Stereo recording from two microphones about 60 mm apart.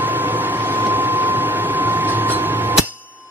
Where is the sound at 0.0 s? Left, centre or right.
Right.